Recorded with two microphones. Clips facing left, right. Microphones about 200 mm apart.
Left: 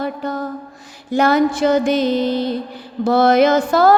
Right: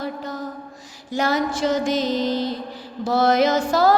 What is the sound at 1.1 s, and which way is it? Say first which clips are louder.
Music: left 7 dB; 55° left (ahead or behind).